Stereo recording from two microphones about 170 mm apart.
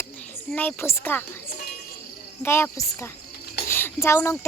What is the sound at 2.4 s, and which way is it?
Speech, 15° left (ahead or behind).